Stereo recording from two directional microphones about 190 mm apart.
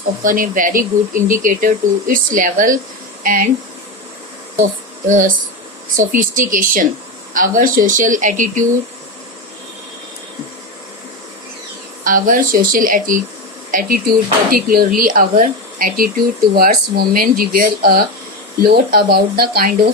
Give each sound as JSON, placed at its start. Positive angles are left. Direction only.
{"t": 0.2, "sound": "speech", "side_deg": -45}
{"t": 5.0, "sound": "speech", "side_deg": -45}
{"t": 12.0, "sound": "speech", "side_deg": -45}